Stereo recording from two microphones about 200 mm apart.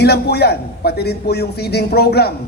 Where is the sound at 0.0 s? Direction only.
55° left (ahead or behind).